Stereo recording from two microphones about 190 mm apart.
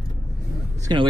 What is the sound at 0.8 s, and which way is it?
Speech, 25° right (ahead or behind).